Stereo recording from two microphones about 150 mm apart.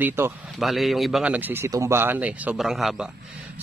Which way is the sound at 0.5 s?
Centre (ahead or behind).